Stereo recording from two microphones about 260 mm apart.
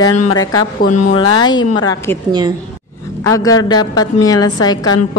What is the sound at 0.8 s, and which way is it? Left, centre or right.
Speech, left.